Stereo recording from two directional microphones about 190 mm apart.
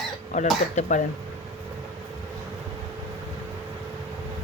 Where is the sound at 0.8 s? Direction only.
40° left (ahead or behind).